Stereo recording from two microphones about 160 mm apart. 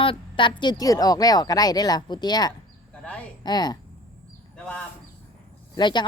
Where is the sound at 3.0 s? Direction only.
10° left (ahead or behind).